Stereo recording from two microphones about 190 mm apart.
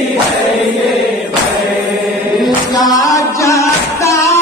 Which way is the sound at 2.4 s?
Centre (ahead or behind).